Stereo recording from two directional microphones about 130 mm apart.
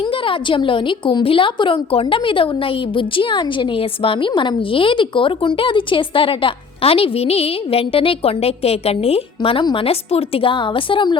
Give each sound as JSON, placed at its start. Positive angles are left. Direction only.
{"t": 0.0, "sound": "a woman's voice", "side_deg": 40}